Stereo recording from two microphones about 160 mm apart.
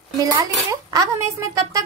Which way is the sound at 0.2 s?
25° right (ahead or behind).